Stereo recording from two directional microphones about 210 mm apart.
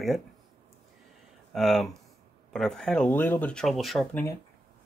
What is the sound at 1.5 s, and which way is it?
Speech, centre (ahead or behind).